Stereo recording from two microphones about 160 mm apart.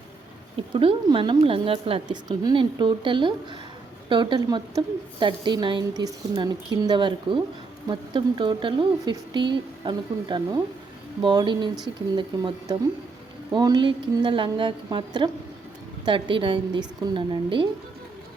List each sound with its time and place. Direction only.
0.7 s a woman's voice: 35° right (ahead or behind)